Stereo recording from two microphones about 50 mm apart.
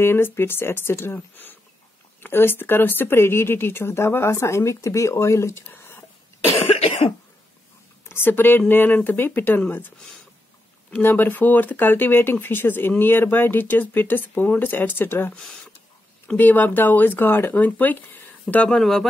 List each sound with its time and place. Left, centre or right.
0.0 s speech: left
8.1 s speech: left
11.0 s speech: left
16.3 s speech: left
18.7 s speech: centre